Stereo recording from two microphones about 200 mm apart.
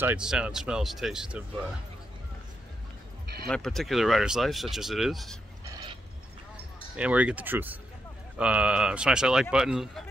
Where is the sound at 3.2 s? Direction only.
50° right (ahead or behind).